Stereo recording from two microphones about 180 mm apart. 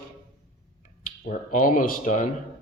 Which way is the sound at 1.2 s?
45° left (ahead or behind).